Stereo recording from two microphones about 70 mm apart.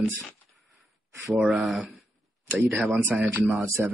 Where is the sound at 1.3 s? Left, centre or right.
Centre.